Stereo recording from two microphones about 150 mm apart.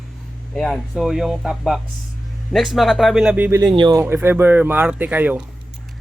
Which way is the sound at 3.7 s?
30° right (ahead or behind).